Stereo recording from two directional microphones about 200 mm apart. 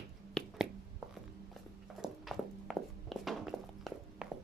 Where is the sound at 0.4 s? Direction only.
5° left (ahead or behind).